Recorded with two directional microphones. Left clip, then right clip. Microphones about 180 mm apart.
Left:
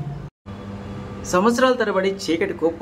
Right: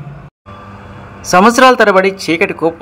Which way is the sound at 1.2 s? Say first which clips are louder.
Right 11 dB; 30° right (ahead or behind).